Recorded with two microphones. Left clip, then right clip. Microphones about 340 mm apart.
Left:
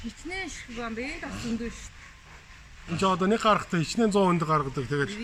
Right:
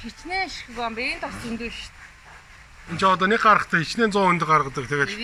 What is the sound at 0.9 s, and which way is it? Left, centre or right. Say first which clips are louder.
Speech: right 8 dB; right.